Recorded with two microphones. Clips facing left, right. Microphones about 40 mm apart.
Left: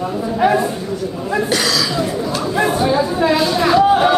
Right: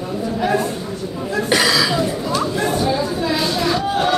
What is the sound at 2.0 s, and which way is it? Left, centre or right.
Chatter, centre.